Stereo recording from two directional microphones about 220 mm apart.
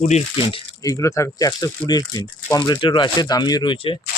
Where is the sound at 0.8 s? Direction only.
15° left (ahead or behind).